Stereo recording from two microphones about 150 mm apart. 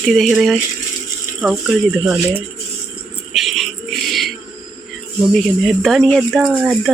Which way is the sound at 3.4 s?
Centre (ahead or behind).